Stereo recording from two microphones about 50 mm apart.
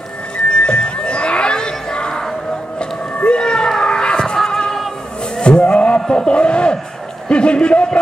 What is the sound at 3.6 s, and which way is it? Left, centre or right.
Music, centre.